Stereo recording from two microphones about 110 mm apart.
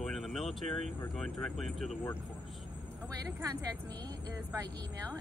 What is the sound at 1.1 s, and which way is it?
Speech, centre (ahead or behind).